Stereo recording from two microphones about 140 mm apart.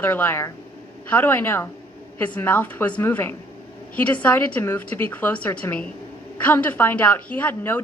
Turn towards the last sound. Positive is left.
turn(degrees=15)  # may be behind; listen again after turning